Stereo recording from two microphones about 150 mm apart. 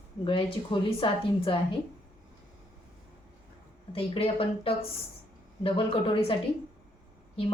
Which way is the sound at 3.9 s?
40° left (ahead or behind).